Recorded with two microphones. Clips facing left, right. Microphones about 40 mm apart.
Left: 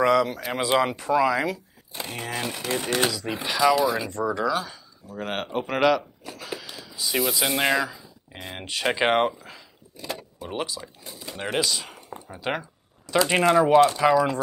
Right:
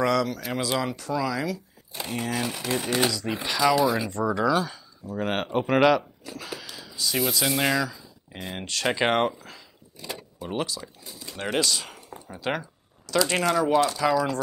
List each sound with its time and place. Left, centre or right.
0.0 s speech: centre
0.6 s speech: left
1.9 s speech: centre
6.5 s a sound: centre
7.0 s speech: centre
8.3 s speech: centre
11.4 s speech: centre